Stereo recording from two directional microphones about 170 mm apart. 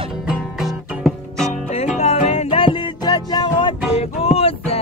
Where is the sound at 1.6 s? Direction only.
40° left (ahead or behind).